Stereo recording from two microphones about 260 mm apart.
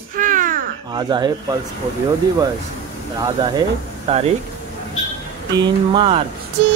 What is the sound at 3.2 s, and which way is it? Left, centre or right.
Speech, centre.